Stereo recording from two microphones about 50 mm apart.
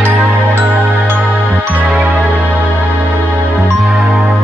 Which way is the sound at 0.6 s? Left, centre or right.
Right.